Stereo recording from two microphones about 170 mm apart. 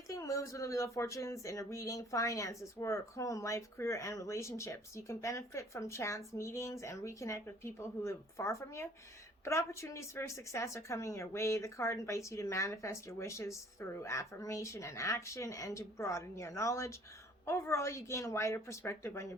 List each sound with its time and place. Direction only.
0.1 s speech: 20° left (ahead or behind)